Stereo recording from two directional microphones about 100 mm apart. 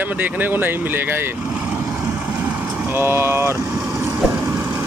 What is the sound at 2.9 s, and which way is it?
Speech, 25° right (ahead or behind).